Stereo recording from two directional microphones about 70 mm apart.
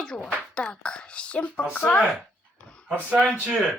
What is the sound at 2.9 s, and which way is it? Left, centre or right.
Speech, centre.